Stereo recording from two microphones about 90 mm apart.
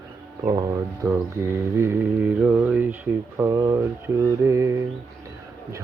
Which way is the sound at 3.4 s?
35° right (ahead or behind).